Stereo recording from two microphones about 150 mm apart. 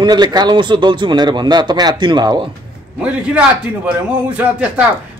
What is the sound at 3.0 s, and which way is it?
A man's voice, 5° right (ahead or behind).